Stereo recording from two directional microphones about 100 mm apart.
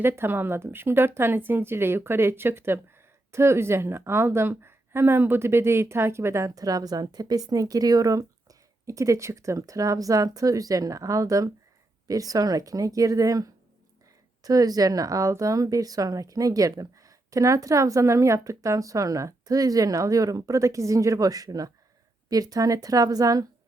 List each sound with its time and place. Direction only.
0.0 s a woman's voice: 20° right (ahead or behind); by 23.5 s 35° right (ahead or behind)